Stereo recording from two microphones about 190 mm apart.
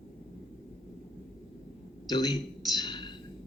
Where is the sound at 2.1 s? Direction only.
20° left (ahead or behind).